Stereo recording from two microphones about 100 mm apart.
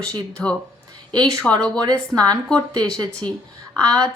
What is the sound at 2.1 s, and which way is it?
Speech, 40° right (ahead or behind).